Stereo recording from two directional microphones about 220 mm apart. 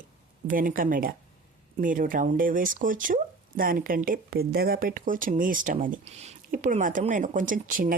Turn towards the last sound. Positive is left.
turn(degrees=-40)  # may be behind; listen again after turning